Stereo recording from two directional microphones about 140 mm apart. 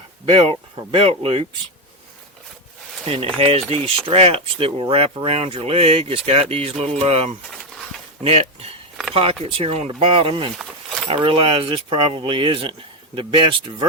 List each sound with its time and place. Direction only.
0.3 s speech: 40° right (ahead or behind)
3.1 s speech: 40° right (ahead or behind)